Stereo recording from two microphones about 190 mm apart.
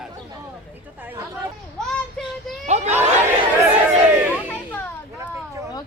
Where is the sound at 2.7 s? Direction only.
35° right (ahead or behind).